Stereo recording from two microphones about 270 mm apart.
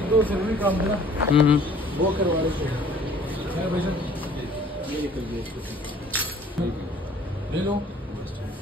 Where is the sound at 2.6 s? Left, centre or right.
Centre.